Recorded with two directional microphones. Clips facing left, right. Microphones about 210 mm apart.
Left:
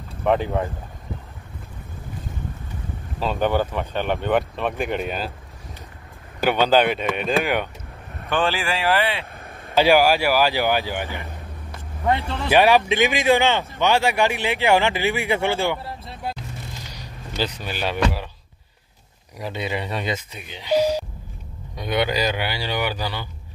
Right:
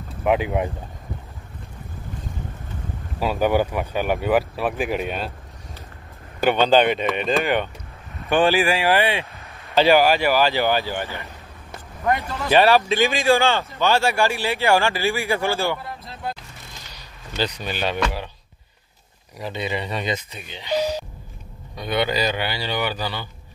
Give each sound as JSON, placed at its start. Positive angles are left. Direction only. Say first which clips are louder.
{"t": 0.2, "sound": "speech", "louder": "even", "side_deg": -5}
{"t": 3.2, "sound": "speech", "louder": "right 2 dB", "side_deg": -10}
{"t": 6.4, "sound": "speech", "louder": "right 1 dB", "side_deg": 5}
{"t": 8.3, "sound": "speech", "louder": "right 5 dB", "side_deg": -15}
{"t": 9.8, "sound": "speech", "louder": "even", "side_deg": 10}
{"t": 12.1, "sound": "speech", "louder": "even", "side_deg": 25}
{"t": 12.4, "sound": "speech", "louder": "even", "side_deg": 15}
{"t": 16.9, "sound": "a sound", "louder": "right 2 dB", "side_deg": 5}
{"t": 19.3, "sound": "speech", "louder": "even", "side_deg": 5}